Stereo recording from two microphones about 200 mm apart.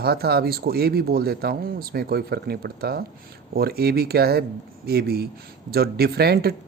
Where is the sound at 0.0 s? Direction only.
50° right (ahead or behind).